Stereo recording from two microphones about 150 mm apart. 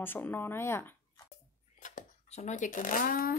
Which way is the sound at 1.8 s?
50° left (ahead or behind).